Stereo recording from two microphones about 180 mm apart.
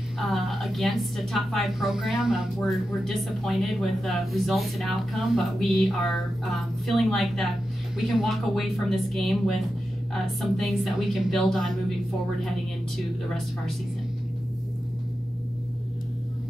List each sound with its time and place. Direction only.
0.2 s a woman's voice: centre (ahead or behind)